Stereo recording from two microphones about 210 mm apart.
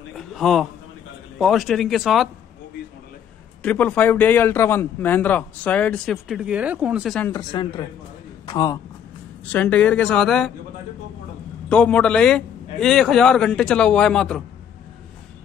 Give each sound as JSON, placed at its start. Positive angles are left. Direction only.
{"t": 0.1, "sound": "a sound", "side_deg": 0}
{"t": 1.4, "sound": "a man's voice", "side_deg": 0}
{"t": 3.6, "sound": "a man's voice", "side_deg": 5}
{"t": 7.2, "sound": "speech", "side_deg": 20}
{"t": 9.5, "sound": "a man's voice", "side_deg": 5}
{"t": 11.7, "sound": "a man's voice", "side_deg": 5}